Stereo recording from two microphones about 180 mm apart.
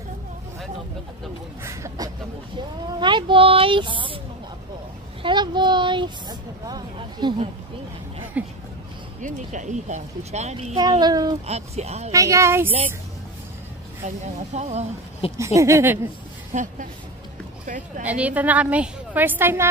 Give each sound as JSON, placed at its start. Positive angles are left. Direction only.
{"t": 1.6, "sound": "speech", "side_deg": -15}
{"t": 5.2, "sound": "speech", "side_deg": -25}
{"t": 8.4, "sound": "a woman's voice", "side_deg": -10}
{"t": 9.2, "sound": "speech", "side_deg": -45}
{"t": 10.8, "sound": "speech", "side_deg": -25}
{"t": 11.4, "sound": "speech", "side_deg": -35}
{"t": 12.1, "sound": "a woman's voice", "side_deg": -15}
{"t": 14.0, "sound": "speech", "side_deg": -40}
{"t": 15.3, "sound": "a woman's voice", "side_deg": -15}
{"t": 16.5, "sound": "speech", "side_deg": -45}
{"t": 18.0, "sound": "a woman's voice", "side_deg": -10}